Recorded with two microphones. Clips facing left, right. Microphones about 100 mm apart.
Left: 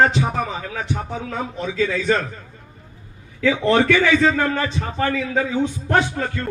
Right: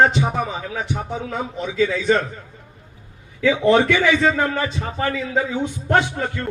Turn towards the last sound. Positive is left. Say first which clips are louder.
# left 1 dB
turn(degrees=-10)  # may be behind; listen again after turning